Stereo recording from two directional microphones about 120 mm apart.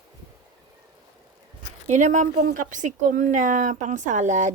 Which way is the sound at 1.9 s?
85° right.